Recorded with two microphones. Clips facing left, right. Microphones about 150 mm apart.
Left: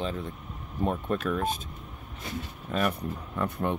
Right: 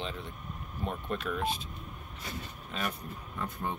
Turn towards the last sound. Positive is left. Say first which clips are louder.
# left 7 dB
turn(degrees=65)  # may be behind; listen again after turning